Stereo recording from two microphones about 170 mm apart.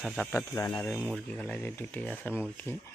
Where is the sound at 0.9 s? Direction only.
5° right (ahead or behind).